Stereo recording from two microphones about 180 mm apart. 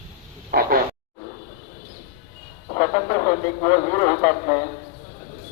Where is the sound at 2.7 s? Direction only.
30° left (ahead or behind).